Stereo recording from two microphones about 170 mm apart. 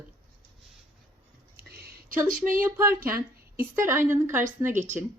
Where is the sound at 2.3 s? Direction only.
50° right (ahead or behind).